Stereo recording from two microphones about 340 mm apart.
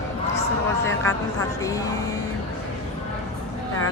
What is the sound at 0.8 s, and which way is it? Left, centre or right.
Speech, centre.